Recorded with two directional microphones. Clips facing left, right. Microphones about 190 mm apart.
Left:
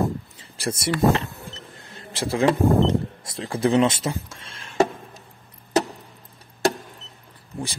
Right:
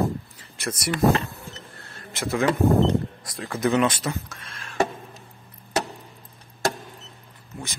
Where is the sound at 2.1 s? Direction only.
30° left (ahead or behind).